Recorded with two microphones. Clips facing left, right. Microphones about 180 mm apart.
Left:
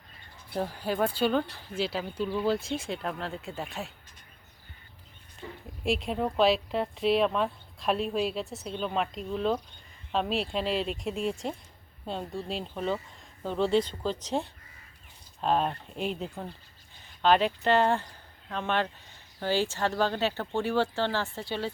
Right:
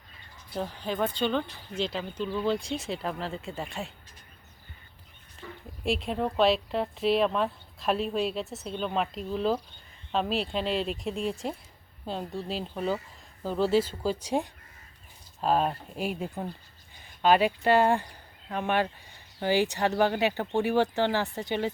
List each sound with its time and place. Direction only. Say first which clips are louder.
0.5 s speech: left 2 dB; 10° left (ahead or behind)
5.4 s a sound: left 1 dB; 20° left (ahead or behind)
5.8 s speech: even; centre (ahead or behind); by 21.7 s 15° right (ahead or behind)